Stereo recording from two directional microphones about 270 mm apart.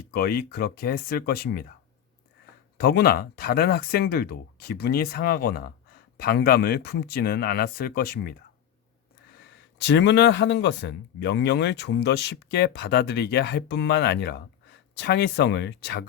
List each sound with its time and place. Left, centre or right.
0.1 s speech: left
2.7 s speech: left
9.8 s speech: left